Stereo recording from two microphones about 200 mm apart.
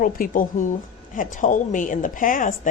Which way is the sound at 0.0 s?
45° left (ahead or behind).